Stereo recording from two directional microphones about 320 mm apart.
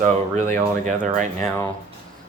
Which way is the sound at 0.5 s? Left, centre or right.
Right.